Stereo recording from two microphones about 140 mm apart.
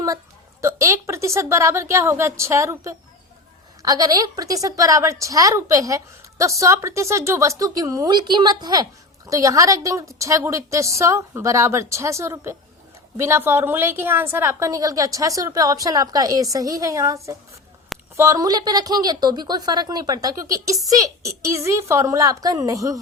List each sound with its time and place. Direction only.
0.6 s a woman's voice: 20° right (ahead or behind)
18.2 s a woman's voice: 25° right (ahead or behind)